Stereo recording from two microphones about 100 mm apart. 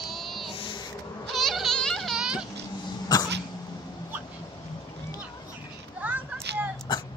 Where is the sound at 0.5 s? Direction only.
60° left (ahead or behind).